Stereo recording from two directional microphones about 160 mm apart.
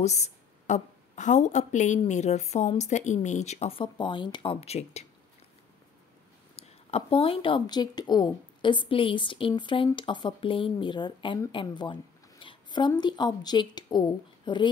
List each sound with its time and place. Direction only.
0.0 s a woman's voice: 45° left (ahead or behind)
6.5 s speech: 35° left (ahead or behind)